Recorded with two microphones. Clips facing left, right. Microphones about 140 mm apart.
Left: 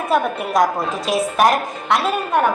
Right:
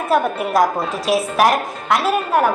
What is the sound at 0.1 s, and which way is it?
A woman's voice, centre (ahead or behind).